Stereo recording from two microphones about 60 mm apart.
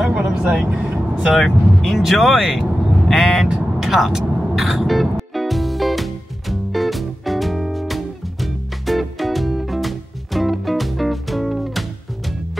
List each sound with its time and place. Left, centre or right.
0.1 s speech: centre
1.4 s speech: centre
3.8 s music: centre